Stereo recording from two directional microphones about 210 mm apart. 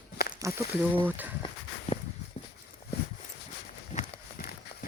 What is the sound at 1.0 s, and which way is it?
Speech, 10° right (ahead or behind).